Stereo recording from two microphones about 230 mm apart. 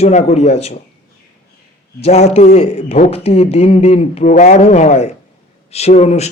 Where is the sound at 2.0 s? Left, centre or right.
Left.